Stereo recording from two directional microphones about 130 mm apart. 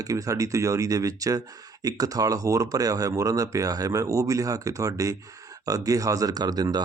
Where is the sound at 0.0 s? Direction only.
25° right (ahead or behind).